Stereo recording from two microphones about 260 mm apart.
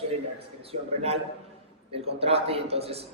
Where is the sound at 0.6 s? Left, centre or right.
Right.